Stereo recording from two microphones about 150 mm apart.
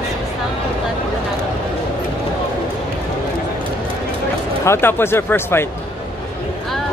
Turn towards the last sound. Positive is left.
turn(degrees=15)  # may be behind; listen again after turning